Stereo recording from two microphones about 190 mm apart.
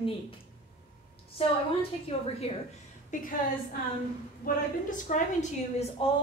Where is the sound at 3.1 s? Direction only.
40° left (ahead or behind).